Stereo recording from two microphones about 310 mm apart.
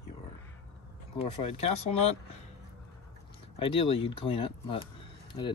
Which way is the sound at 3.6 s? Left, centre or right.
Centre.